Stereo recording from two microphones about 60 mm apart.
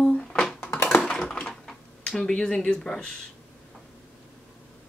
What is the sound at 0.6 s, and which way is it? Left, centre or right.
Typing, left.